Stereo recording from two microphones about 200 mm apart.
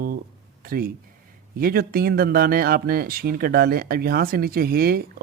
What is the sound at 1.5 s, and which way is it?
Speech, 50° right (ahead or behind).